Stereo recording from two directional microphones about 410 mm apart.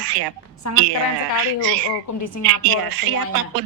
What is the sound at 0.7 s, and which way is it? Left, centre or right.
Speech, left.